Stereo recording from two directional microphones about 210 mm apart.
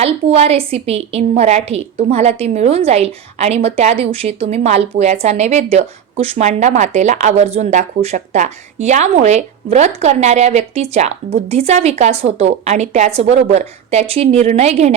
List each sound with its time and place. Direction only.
0.0 s a woman's voice: 30° right (ahead or behind)